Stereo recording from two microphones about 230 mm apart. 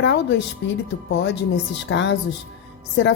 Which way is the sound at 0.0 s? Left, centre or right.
Left.